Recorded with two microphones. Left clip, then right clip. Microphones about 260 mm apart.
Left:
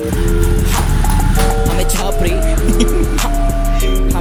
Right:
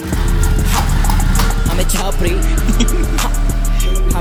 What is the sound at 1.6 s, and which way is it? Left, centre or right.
Music, centre.